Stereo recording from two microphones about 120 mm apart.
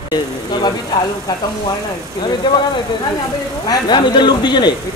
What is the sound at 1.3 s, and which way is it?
A man's voice, 35° left (ahead or behind).